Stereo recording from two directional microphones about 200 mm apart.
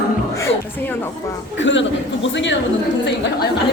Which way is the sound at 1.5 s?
65° left (ahead or behind).